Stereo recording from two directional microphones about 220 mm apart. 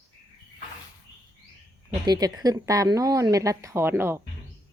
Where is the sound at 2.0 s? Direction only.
20° right (ahead or behind).